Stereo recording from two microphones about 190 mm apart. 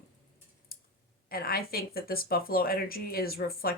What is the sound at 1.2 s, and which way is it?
Speech, 50° left (ahead or behind).